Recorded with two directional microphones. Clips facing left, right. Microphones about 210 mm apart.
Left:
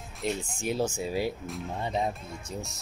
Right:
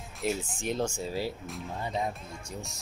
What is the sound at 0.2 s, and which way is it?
Speech, 5° right (ahead or behind).